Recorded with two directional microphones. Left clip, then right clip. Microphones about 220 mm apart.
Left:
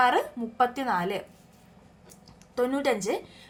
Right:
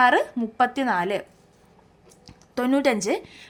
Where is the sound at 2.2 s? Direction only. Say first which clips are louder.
Right 3 dB; 40° right (ahead or behind).